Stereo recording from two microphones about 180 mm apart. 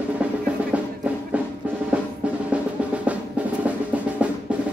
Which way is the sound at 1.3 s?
10° right (ahead or behind).